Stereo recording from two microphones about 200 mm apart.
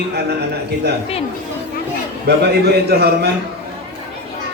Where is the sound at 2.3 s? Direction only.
55° right (ahead or behind).